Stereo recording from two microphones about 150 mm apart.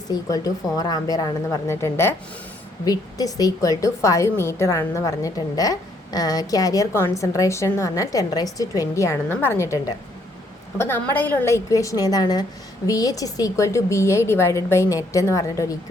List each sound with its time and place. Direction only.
0.1 s a woman's voice: 25° left (ahead or behind)